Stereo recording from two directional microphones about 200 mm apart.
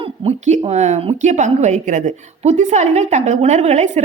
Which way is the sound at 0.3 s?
35° right (ahead or behind).